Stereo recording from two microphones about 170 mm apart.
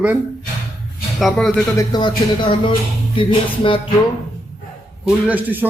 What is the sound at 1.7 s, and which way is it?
Speech, 25° left (ahead or behind).